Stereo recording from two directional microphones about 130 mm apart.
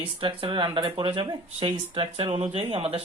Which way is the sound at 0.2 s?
40° right (ahead or behind).